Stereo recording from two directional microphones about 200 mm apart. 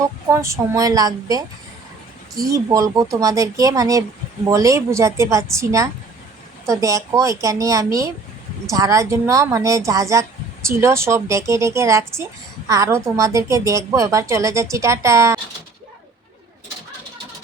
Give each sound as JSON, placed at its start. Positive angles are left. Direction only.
{"t": 0.0, "sound": "a woman's voice", "side_deg": -15}